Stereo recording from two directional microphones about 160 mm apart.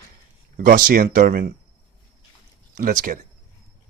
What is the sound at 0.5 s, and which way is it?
Speech, 60° right (ahead or behind).